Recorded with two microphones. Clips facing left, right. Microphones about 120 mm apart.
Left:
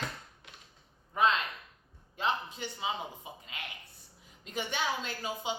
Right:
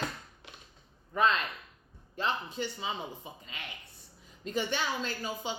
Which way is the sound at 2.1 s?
15° left (ahead or behind).